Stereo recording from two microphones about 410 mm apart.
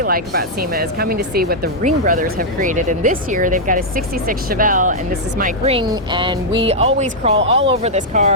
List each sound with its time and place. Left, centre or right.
0.0 s speech: right